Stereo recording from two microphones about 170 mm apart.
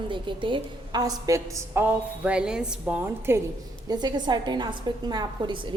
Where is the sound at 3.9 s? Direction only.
25° right (ahead or behind).